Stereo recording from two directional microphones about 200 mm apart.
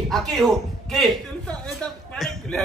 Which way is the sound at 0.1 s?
Centre (ahead or behind).